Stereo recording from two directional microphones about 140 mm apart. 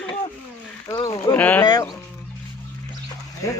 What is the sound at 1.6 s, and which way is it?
Speech, 30° left (ahead or behind).